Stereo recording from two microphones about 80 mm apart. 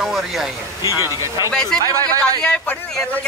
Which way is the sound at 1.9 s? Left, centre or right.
Right.